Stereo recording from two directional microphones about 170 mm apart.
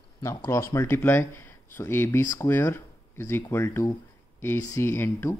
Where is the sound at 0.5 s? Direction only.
15° left (ahead or behind).